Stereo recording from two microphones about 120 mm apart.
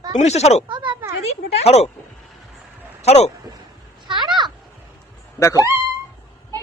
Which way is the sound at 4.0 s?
40° right (ahead or behind).